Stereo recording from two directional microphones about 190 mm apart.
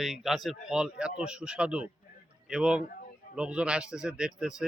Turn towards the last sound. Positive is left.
turn(degrees=-5)  # may be behind; listen again after turning